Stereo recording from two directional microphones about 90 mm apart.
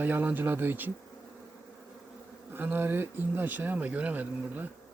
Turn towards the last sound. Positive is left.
turn(degrees=-20)  # may be behind; listen again after turning